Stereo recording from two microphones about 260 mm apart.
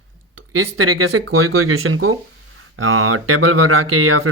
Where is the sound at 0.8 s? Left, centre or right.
Right.